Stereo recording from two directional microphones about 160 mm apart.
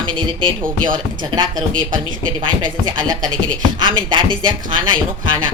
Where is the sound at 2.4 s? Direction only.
30° right (ahead or behind).